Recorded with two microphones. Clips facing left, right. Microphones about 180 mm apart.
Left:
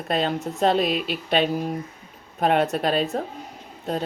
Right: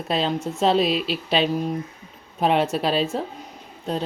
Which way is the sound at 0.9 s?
30° right (ahead or behind).